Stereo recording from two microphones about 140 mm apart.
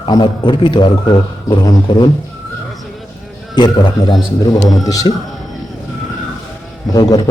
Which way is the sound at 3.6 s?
30° left (ahead or behind).